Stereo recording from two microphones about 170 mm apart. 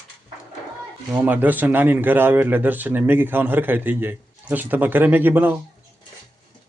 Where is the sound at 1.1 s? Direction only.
10° right (ahead or behind).